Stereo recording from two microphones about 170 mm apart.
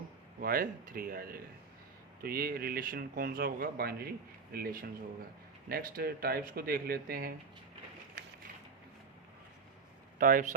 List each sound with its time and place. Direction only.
0.3 s speech: 60° right (ahead or behind)
10.2 s speech: 55° right (ahead or behind)